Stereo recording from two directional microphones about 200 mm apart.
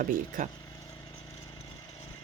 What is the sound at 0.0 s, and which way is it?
Speech, 40° right (ahead or behind).